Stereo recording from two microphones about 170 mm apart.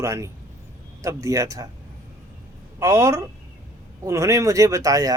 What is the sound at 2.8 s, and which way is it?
Speech, 15° right (ahead or behind).